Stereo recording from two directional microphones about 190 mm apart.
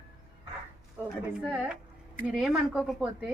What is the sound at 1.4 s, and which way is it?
Speech, 5° right (ahead or behind).